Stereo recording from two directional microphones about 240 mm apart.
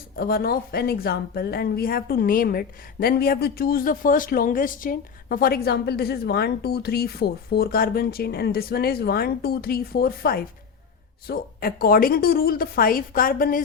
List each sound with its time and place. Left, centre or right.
0.2 s a woman's voice: left